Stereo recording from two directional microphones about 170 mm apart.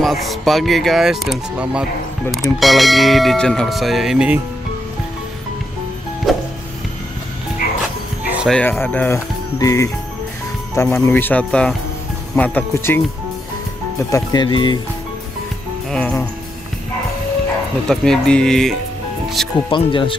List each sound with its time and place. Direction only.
0.0 s speech: centre (ahead or behind)
6.3 s music: centre (ahead or behind)
8.2 s music: 10° right (ahead or behind)
8.5 s speech: 10° left (ahead or behind); by 14.8 s 25° left (ahead or behind)
15.9 s speech: 10° left (ahead or behind)
17.8 s speech: 5° left (ahead or behind)
19.4 s music: centre (ahead or behind)
19.7 s speech: 30° left (ahead or behind)